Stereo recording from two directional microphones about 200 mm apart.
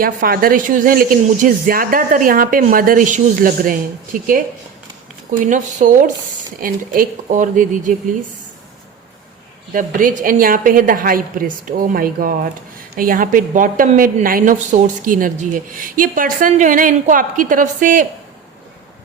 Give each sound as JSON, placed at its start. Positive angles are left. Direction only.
{"t": 0.0, "sound": "speech", "side_deg": -45}
{"t": 5.5, "sound": "a woman's voice", "side_deg": -40}
{"t": 9.7, "sound": "a woman's voice", "side_deg": -40}